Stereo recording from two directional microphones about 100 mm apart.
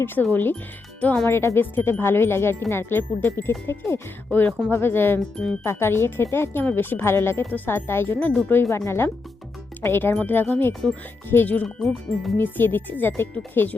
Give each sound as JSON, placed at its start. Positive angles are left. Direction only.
{"t": 0.0, "sound": "speech", "side_deg": 20}
{"t": 11.8, "sound": "speech", "side_deg": 5}
{"t": 12.4, "sound": "speech", "side_deg": 20}